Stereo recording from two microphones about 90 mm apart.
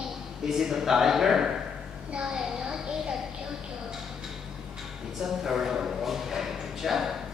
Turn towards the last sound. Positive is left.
turn(degrees=-5)  # may be behind; listen again after turning